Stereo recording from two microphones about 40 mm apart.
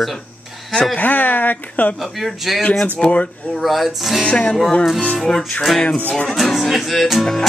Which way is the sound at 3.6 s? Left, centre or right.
Centre.